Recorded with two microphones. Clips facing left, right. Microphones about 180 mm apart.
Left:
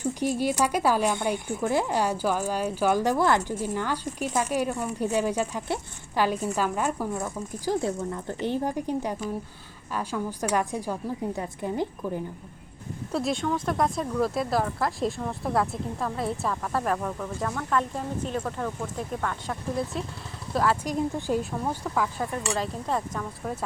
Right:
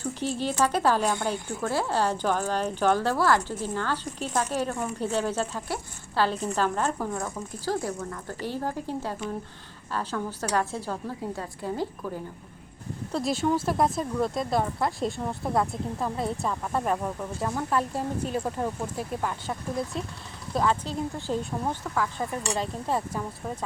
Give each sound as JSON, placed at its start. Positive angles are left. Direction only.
{"t": 0.0, "sound": "a woman's voice", "side_deg": 15}
{"t": 13.1, "sound": "speech", "side_deg": 5}
{"t": 17.0, "sound": "speech", "side_deg": -15}
{"t": 20.8, "sound": "speech", "side_deg": 15}
{"t": 22.5, "sound": "speech", "side_deg": 0}